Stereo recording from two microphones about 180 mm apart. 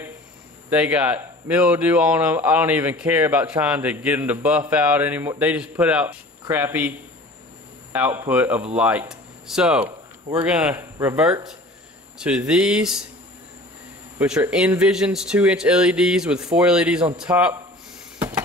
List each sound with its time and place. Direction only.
0.7 s speech: 5° right (ahead or behind)
14.1 s speech: 5° right (ahead or behind)